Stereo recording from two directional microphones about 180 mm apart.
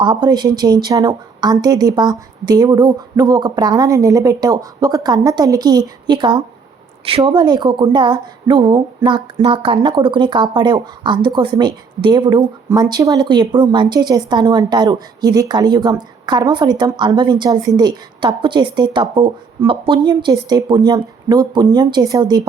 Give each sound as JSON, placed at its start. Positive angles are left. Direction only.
{"t": 0.0, "sound": "speech", "side_deg": -25}